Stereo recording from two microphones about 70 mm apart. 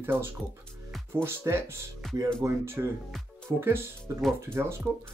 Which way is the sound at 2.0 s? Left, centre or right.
Centre.